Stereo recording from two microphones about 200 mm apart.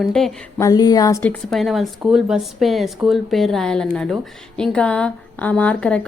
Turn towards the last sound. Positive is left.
turn(degrees=5)  # may be behind; listen again after turning